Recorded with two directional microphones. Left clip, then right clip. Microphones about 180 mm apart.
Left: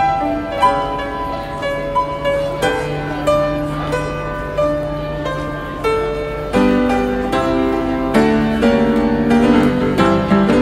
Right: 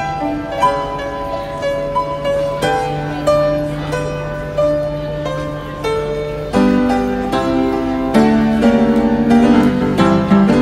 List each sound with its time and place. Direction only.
6.5 s music: 20° right (ahead or behind)